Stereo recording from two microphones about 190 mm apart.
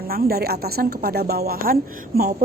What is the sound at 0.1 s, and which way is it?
A woman's voice, 55° right (ahead or behind).